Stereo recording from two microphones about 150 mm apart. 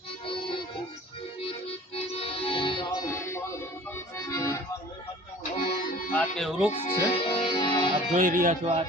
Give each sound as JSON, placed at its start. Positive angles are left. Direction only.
{"t": 0.3, "sound": "music", "side_deg": 35}
{"t": 2.0, "sound": "music", "side_deg": 40}
{"t": 3.9, "sound": "accordion", "side_deg": 20}
{"t": 5.6, "sound": "accordion", "side_deg": 50}
{"t": 6.1, "sound": "music", "side_deg": 0}
{"t": 6.7, "sound": "music", "side_deg": 40}
{"t": 8.1, "sound": "speech", "side_deg": -60}